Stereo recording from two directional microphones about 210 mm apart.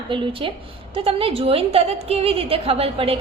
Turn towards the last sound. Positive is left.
turn(degrees=-30)  # may be behind; listen again after turning